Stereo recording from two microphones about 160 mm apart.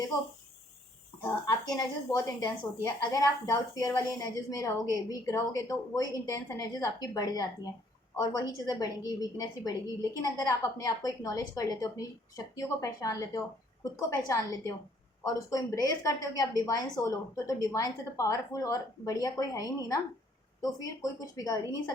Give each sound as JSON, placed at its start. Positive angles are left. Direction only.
{"t": 1.2, "sound": "a woman's voice", "side_deg": 20}